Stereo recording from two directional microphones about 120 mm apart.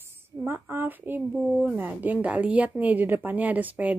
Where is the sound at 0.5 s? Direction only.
20° right (ahead or behind).